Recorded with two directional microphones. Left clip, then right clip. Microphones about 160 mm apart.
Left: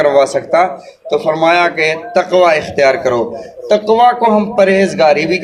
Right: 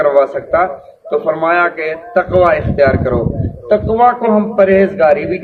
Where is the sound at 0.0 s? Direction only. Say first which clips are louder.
Left 1 dB; 40° left (ahead or behind).